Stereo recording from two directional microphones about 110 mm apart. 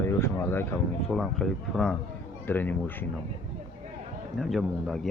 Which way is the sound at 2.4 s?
15° left (ahead or behind).